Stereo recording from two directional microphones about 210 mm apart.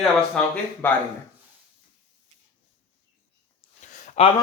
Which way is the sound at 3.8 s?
35° left (ahead or behind).